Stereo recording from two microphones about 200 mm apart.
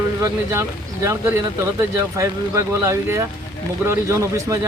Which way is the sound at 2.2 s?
15° right (ahead or behind).